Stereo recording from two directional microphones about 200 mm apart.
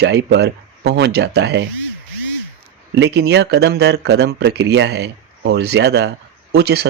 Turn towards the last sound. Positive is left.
turn(degrees=-55)  # may be behind; listen again after turning